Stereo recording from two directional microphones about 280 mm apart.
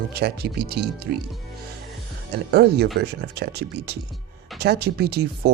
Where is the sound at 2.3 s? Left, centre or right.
Right.